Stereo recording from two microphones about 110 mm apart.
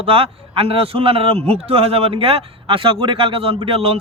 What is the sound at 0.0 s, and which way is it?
Speech, 60° right (ahead or behind).